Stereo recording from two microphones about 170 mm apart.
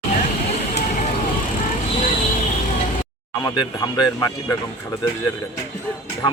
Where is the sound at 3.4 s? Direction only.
25° left (ahead or behind).